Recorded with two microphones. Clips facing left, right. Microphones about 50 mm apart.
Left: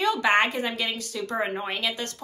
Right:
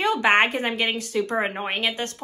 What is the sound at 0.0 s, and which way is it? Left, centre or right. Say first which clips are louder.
A woman's voice: right 2 dB; right.